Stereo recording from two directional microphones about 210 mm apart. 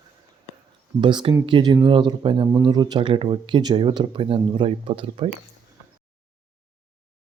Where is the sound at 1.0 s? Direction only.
20° right (ahead or behind).